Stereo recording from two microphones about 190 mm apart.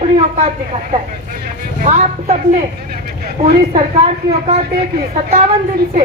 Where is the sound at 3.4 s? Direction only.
30° right (ahead or behind).